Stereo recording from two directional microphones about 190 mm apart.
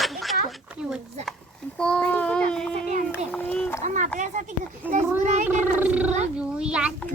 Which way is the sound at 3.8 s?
40° right (ahead or behind).